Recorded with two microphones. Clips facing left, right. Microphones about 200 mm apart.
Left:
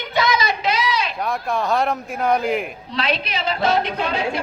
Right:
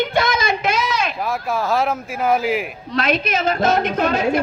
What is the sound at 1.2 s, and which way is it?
Speech, 5° right (ahead or behind).